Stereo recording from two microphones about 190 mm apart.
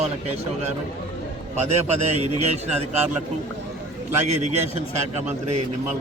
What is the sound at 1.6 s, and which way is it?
A man's voice, 35° right (ahead or behind).